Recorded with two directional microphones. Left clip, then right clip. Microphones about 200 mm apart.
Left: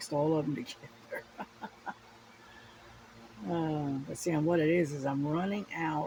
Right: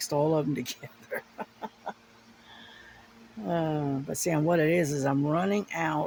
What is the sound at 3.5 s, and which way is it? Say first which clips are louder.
Speech: right 5 dB; 65° right (ahead or behind).